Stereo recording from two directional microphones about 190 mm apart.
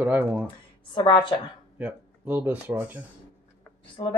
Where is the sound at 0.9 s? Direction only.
25° left (ahead or behind).